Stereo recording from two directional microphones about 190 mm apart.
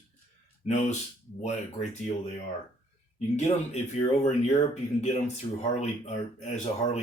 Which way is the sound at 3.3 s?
35° left (ahead or behind).